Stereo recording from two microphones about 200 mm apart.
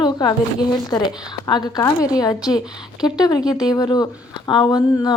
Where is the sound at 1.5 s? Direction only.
20° left (ahead or behind).